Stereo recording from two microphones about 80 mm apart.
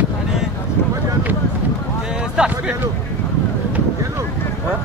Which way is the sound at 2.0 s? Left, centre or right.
Centre.